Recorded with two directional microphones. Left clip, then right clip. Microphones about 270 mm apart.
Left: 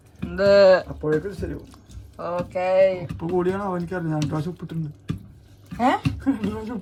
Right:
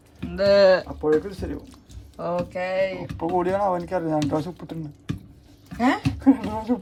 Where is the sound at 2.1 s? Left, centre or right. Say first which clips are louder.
Even; centre.